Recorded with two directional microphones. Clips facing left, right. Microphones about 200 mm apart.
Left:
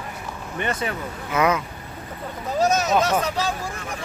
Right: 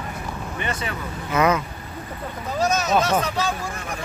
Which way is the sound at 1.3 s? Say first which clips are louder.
Right 1 dB; 10° left (ahead or behind).